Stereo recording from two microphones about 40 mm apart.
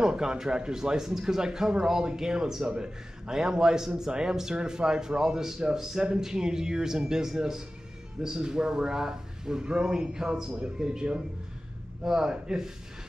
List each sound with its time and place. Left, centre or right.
0.2 s a man's voice: centre